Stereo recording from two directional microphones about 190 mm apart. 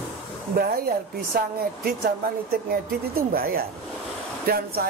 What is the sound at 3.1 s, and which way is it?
Speech, 50° right (ahead or behind).